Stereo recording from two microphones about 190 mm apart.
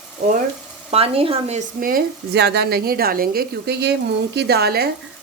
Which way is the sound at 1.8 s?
55° right (ahead or behind).